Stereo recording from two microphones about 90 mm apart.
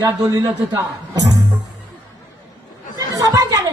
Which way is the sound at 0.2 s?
40° right (ahead or behind).